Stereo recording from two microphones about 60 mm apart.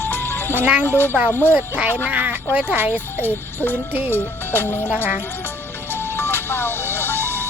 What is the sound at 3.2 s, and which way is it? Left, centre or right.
Music, left.